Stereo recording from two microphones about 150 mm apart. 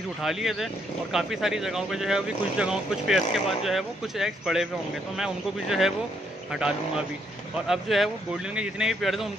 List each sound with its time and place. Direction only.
0.2 s speech: centre (ahead or behind)